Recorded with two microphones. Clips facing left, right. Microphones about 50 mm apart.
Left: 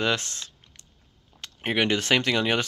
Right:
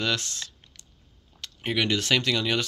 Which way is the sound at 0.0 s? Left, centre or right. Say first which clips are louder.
Left 2 dB; left.